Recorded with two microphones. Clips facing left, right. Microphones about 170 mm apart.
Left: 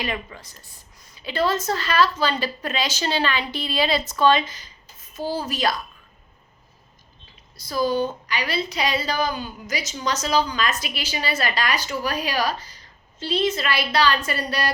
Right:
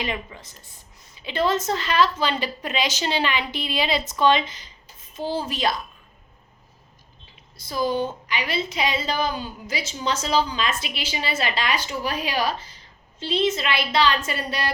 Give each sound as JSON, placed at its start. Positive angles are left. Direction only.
{"t": 0.0, "sound": "a woman's voice", "side_deg": -20}
{"t": 7.5, "sound": "a woman's voice", "side_deg": -25}